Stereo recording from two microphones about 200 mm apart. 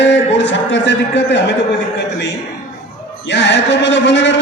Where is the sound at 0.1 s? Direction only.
60° left (ahead or behind).